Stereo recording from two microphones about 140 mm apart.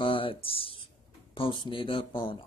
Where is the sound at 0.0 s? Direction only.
40° left (ahead or behind).